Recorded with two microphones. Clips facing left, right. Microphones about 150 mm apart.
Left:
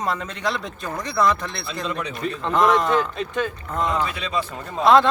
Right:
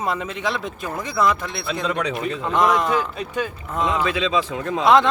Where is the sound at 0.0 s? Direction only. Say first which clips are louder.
Right 1 dB; 5° right (ahead or behind).